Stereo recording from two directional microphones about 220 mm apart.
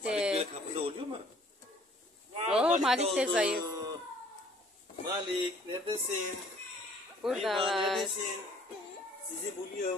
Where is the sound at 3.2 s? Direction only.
5° right (ahead or behind).